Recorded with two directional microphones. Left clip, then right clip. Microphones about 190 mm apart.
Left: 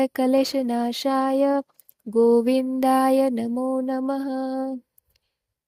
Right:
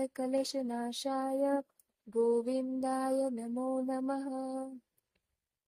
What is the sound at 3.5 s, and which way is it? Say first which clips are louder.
Music: left 10 dB; 35° left (ahead or behind).